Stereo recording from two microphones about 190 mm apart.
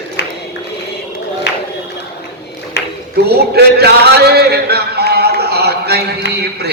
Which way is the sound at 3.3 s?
60° right (ahead or behind).